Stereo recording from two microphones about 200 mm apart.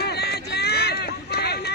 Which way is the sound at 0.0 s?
55° left (ahead or behind).